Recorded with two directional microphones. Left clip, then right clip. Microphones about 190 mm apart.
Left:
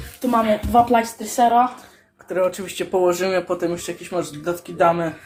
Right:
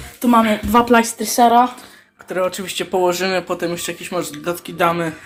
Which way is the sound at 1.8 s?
Centre (ahead or behind).